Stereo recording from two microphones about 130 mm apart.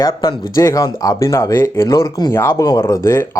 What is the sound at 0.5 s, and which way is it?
Speech, 25° left (ahead or behind).